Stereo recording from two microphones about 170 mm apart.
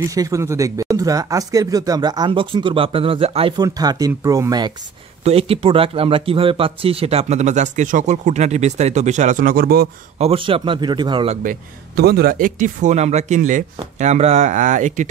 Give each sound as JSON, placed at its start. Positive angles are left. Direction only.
{"t": 0.0, "sound": "speech", "side_deg": -20}
{"t": 3.5, "sound": "speech", "side_deg": -20}
{"t": 5.2, "sound": "speech", "side_deg": -35}
{"t": 10.1, "sound": "speech", "side_deg": -35}
{"t": 11.4, "sound": "speech", "side_deg": -70}